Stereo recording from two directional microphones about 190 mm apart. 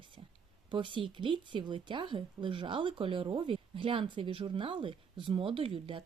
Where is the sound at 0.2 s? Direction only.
30° right (ahead or behind).